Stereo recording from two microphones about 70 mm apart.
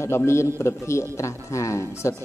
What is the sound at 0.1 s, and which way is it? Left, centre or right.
A man's voice, left.